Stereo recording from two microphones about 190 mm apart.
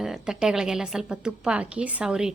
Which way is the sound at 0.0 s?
5° right (ahead or behind).